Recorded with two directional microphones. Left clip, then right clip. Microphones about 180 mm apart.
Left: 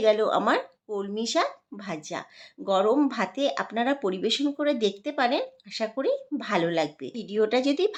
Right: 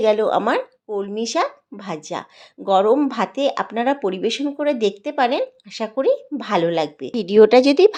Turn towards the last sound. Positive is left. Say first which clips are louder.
# right 12 dB
turn(degrees=-40)  # may be behind; listen again after turning